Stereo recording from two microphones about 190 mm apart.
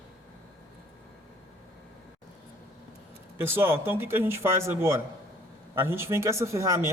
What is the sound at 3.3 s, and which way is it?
A man's voice, 10° right (ahead or behind).